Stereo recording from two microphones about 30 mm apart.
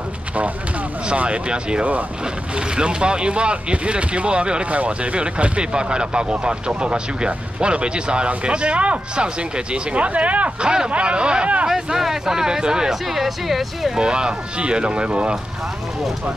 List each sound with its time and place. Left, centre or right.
1.1 s speech: right
1.5 s speech: right
4.6 s speech: right
10.6 s speech: right
10.9 s speech: right
11.7 s speech: centre
13.0 s speech: centre
13.9 s speech: right